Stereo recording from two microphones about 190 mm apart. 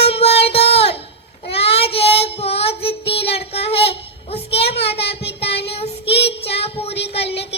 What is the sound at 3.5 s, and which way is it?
Child singing, 30° left (ahead or behind).